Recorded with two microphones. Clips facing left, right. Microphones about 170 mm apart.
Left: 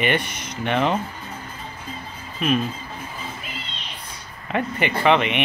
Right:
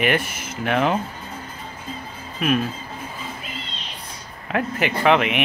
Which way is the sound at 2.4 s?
5° right (ahead or behind).